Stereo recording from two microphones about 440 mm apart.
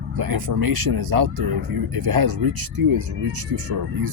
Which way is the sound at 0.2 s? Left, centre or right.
Right.